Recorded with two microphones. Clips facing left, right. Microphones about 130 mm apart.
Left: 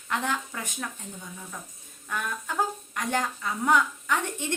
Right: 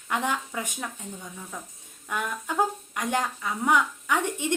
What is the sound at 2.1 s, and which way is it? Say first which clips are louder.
A woman's voice: right 2 dB; 15° right (ahead or behind).